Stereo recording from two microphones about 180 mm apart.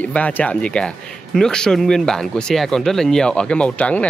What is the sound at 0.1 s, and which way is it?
Speech, 10° left (ahead or behind).